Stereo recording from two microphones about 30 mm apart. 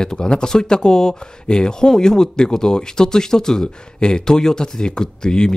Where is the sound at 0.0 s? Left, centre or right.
Left.